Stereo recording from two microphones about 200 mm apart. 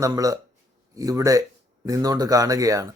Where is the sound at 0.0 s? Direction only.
15° right (ahead or behind).